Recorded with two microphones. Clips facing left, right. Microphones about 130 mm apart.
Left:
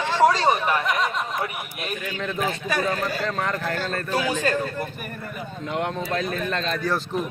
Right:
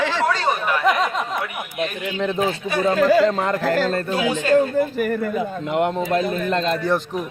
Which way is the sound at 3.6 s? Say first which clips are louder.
Right 8 dB; 90° right.